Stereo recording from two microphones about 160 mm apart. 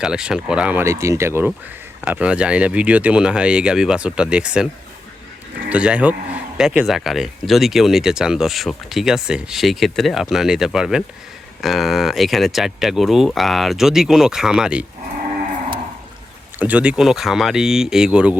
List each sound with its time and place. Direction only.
0.0 s speech: 5° right (ahead or behind)
16.6 s speech: 10° right (ahead or behind)